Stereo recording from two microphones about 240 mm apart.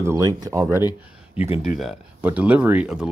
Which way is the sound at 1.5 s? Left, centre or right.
Left.